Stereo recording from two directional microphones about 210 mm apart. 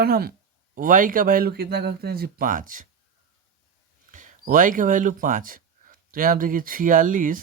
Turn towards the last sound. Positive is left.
turn(degrees=-40)  # may be behind; listen again after turning